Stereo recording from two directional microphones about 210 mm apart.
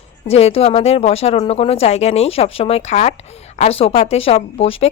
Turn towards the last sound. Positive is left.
turn(degrees=30)  # may be behind; listen again after turning